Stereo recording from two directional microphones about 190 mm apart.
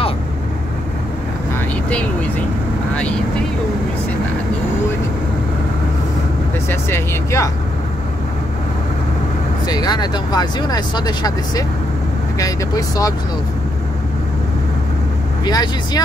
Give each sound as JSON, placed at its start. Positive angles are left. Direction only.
{"t": 6.7, "sound": "speech", "side_deg": 15}
{"t": 9.7, "sound": "speech", "side_deg": 20}
{"t": 15.4, "sound": "speech", "side_deg": 20}